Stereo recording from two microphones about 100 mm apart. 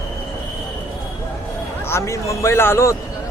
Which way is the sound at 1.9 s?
30° left (ahead or behind).